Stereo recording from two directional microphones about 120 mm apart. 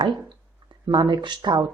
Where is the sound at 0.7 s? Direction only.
40° right (ahead or behind).